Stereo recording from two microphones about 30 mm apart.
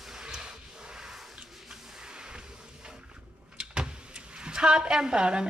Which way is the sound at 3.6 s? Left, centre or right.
Right.